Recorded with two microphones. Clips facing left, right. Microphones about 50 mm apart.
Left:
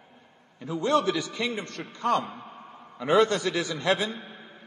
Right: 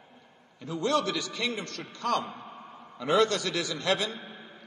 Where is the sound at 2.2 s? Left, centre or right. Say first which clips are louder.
Left 1 dB; centre.